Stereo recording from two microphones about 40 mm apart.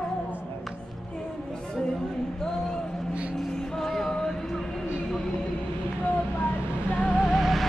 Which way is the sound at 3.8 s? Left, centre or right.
Centre.